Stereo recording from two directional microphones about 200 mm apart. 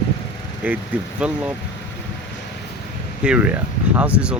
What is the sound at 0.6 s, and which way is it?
Speech, 10° right (ahead or behind).